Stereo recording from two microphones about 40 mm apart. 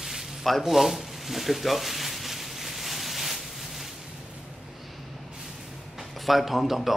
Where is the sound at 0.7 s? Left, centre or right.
Centre.